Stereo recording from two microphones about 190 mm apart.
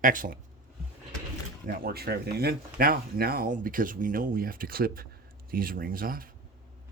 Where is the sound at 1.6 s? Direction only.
50° right (ahead or behind).